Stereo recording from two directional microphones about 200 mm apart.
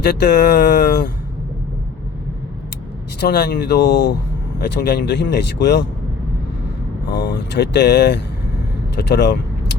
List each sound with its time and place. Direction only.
0.0 s speech: 55° left (ahead or behind)
3.2 s speech: 55° left (ahead or behind)
7.1 s speech: 60° left (ahead or behind)